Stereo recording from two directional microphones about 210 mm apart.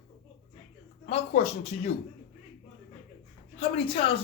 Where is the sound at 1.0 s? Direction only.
30° left (ahead or behind).